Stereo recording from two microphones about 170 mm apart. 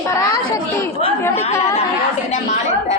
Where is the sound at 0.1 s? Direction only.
20° left (ahead or behind).